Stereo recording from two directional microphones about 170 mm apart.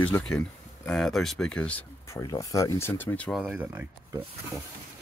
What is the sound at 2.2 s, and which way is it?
Speech, 20° left (ahead or behind).